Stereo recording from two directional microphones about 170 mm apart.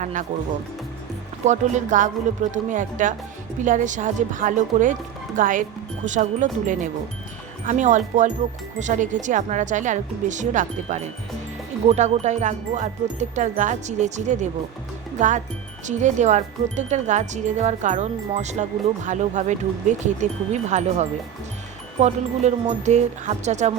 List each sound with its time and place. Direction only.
0.0 s speech: 45° right (ahead or behind)
1.5 s speech: 45° right (ahead or behind)
22.4 s speech: 40° right (ahead or behind)